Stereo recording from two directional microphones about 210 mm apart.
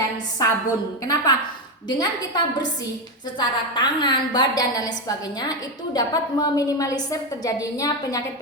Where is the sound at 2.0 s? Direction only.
20° left (ahead or behind).